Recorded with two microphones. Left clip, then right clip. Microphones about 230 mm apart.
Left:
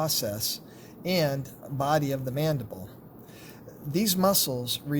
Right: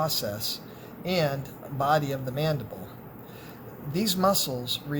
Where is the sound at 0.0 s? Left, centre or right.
Left.